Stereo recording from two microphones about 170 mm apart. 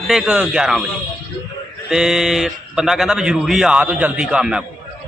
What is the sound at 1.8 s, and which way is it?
Speech, 5° right (ahead or behind).